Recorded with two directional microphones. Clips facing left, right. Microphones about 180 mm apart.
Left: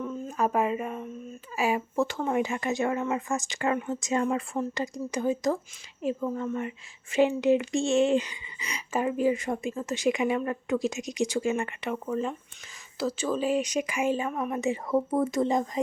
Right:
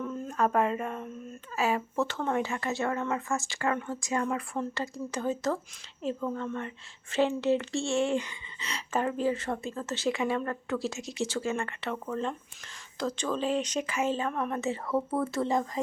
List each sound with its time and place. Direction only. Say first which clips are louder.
0.0 s speech: left 1 dB; centre (ahead or behind); by 4.4 s 25° left (ahead or behind)
4.5 s speech: left 3 dB; 15° left (ahead or behind)